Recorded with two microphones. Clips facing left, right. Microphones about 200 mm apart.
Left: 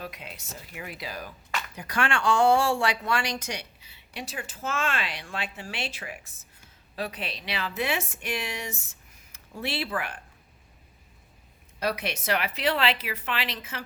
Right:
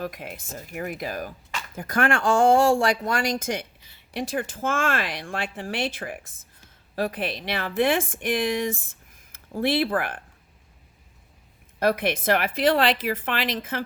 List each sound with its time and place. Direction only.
0.0 s speech: 50° right (ahead or behind)
11.8 s speech: 50° right (ahead or behind)